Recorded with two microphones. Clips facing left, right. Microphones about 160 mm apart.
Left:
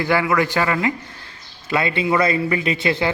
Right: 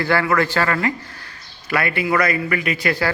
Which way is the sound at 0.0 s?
15° left (ahead or behind).